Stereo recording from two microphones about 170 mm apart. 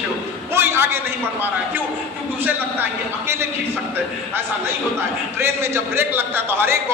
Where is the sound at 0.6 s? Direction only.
15° right (ahead or behind).